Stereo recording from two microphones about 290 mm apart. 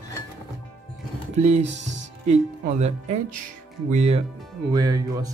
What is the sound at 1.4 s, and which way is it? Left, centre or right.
Speech, right.